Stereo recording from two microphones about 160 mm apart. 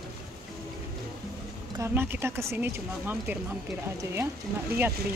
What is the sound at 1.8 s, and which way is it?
Speech, 15° right (ahead or behind).